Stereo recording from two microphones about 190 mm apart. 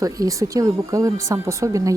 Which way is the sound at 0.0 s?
20° right (ahead or behind).